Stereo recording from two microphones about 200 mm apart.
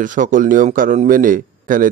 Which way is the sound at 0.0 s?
40° right (ahead or behind).